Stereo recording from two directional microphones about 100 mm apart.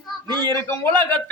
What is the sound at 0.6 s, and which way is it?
Speech, 20° left (ahead or behind).